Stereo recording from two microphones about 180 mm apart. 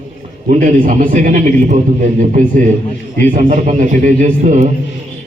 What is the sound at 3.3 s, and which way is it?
A man's voice, 45° right (ahead or behind).